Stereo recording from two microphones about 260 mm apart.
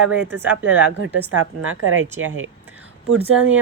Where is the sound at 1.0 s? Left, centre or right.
Right.